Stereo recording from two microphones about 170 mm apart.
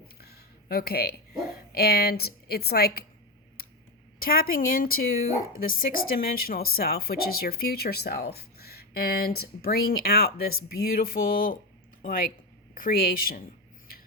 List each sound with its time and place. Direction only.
0.2 s a sound: 65° left (ahead or behind)
1.7 s a woman's voice: 65° left (ahead or behind)
4.2 s speech: 60° left (ahead or behind)